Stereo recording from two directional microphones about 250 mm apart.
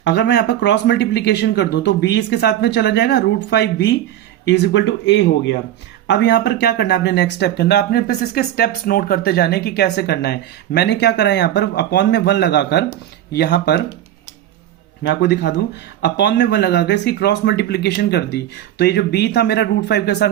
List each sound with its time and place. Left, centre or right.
0.0 s speech: left
15.0 s speech: left